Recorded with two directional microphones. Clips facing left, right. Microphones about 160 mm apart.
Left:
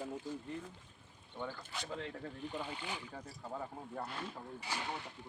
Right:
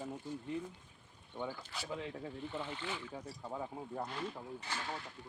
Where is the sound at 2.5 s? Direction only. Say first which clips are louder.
Right 1 dB; 15° left (ahead or behind).